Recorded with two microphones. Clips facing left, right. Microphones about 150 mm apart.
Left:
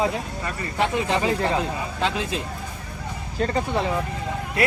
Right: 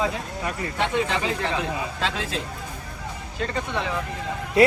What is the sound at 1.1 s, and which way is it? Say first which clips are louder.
Speech: left 4 dB; 35° left (ahead or behind).